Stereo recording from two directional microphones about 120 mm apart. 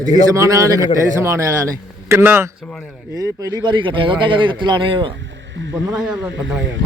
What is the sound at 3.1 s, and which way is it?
Speech, 30° right (ahead or behind).